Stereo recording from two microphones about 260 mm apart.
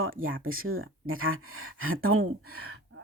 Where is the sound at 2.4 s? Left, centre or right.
Right.